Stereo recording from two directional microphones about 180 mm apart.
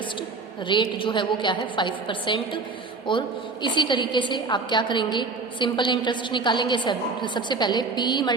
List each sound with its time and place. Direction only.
0.7 s a woman's voice: 25° left (ahead or behind)